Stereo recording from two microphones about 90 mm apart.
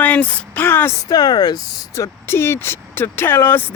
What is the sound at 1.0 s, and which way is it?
Speech, 45° left (ahead or behind).